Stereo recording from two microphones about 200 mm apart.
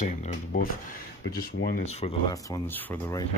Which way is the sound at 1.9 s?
30° left (ahead or behind).